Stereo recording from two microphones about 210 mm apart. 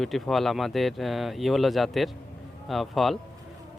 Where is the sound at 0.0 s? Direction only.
Centre (ahead or behind).